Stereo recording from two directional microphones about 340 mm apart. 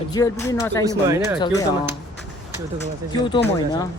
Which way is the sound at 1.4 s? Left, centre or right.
Centre.